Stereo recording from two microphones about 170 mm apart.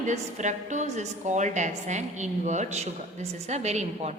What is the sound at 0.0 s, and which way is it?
A woman's voice, 45° right (ahead or behind).